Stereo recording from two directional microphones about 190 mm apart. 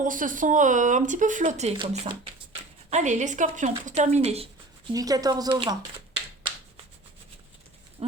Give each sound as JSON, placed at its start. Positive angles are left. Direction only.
{"t": 0.0, "sound": "speech", "side_deg": -45}
{"t": 4.9, "sound": "speech", "side_deg": -20}